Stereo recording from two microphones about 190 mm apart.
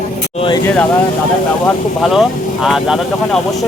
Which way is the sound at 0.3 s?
25° left (ahead or behind).